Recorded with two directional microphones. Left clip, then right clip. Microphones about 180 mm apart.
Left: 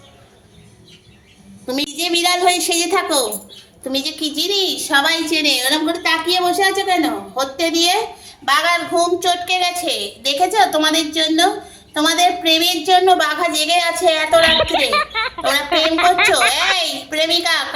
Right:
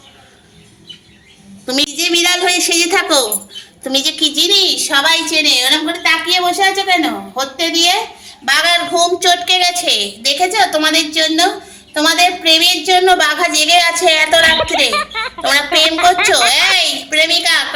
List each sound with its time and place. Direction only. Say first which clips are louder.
1.6 s a woman's voice: right 6 dB; 5° left (ahead or behind); by 7.9 s 20° right (ahead or behind)
8.4 s a woman's voice: right 3 dB; 5° right (ahead or behind)
10.2 s a woman's voice: right 1 dB; 10° right (ahead or behind)
13.1 s a woman's voice: right 3 dB; 5° left (ahead or behind)